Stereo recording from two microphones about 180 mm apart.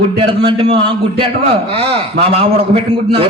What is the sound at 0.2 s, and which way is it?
A man's voice, 30° right (ahead or behind).